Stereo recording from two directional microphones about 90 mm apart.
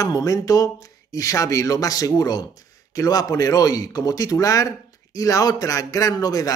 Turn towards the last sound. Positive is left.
turn(degrees=45)  # may be behind; listen again after turning